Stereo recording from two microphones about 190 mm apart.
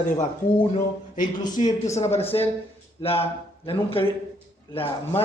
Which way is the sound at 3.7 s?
30° left (ahead or behind).